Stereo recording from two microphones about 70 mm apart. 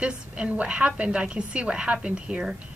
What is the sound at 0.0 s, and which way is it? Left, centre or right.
A woman's voice, centre.